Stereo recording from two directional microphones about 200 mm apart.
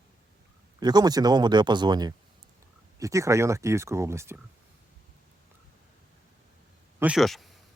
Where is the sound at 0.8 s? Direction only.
20° right (ahead or behind).